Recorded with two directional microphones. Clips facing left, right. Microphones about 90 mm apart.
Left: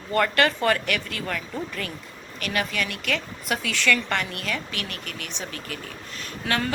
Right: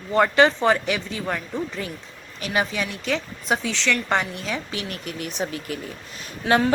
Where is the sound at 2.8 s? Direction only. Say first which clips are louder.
Right 1 dB; 65° left (ahead or behind).